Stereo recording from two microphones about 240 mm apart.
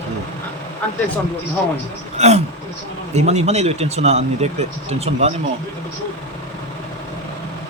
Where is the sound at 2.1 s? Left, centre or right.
Right.